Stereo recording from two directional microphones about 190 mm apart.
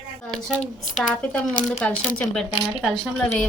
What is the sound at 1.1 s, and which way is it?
Speech, 5° left (ahead or behind).